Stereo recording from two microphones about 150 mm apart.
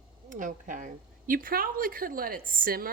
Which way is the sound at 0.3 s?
60° right (ahead or behind).